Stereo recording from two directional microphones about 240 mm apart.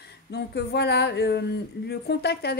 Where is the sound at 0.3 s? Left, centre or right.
Left.